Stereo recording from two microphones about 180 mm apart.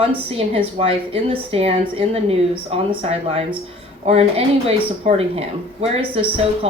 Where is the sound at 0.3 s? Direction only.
35° right (ahead or behind).